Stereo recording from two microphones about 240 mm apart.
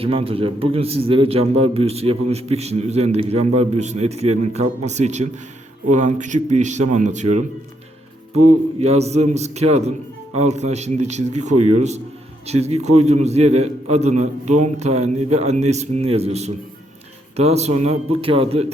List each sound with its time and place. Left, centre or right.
0.0 s a man's voice: right
8.8 s a man's voice: right